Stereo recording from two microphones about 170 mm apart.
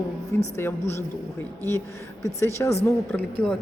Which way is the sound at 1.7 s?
15° left (ahead or behind).